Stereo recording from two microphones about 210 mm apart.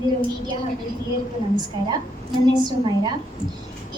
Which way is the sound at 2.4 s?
20° right (ahead or behind).